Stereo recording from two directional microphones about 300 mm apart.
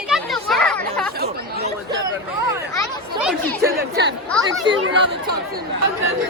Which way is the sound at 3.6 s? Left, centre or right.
Right.